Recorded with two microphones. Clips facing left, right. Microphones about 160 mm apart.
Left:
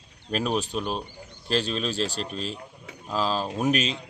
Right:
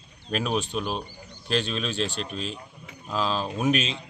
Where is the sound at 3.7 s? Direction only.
40° left (ahead or behind).